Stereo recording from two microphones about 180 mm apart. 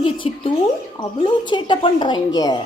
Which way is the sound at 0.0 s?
30° left (ahead or behind).